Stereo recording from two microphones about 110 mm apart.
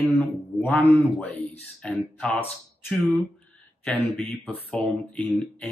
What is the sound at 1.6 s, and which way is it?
Speech, 5° left (ahead or behind).